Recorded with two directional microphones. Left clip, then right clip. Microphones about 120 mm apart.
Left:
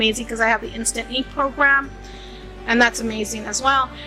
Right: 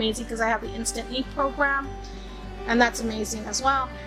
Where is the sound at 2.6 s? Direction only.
10° left (ahead or behind).